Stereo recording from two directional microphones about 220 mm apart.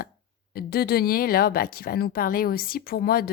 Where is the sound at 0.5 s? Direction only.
45° left (ahead or behind).